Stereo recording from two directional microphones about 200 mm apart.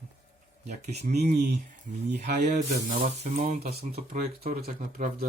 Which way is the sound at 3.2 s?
35° right (ahead or behind).